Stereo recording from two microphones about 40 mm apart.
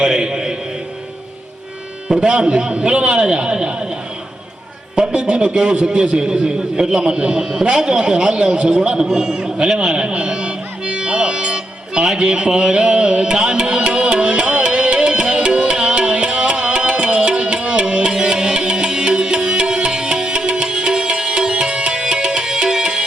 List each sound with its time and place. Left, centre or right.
0.0 s a sound: centre
2.0 s a man's voice: centre
4.9 s a man's voice: right
13.4 s music: right